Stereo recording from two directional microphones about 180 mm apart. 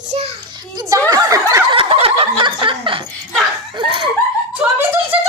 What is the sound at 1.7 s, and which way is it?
Snicker, 30° right (ahead or behind).